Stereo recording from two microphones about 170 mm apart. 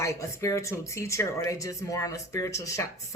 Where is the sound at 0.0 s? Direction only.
20° left (ahead or behind).